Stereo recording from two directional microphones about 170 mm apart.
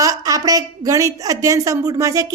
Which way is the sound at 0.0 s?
20° right (ahead or behind).